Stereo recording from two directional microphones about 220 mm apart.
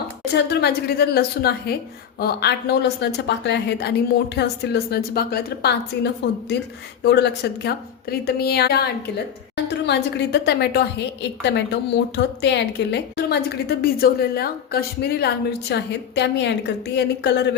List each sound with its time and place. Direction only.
0.3 s a woman's voice: 50° left (ahead or behind)